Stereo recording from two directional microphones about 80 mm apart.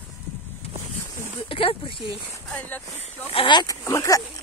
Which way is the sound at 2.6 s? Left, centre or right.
Left.